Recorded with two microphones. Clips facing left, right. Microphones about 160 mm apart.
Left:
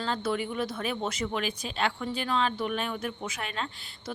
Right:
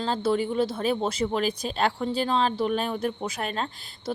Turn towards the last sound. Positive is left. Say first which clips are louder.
# right 5 dB
turn(degrees=-40)  # may be behind; listen again after turning